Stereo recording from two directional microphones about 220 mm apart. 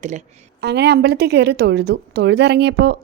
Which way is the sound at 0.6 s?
50° right (ahead or behind).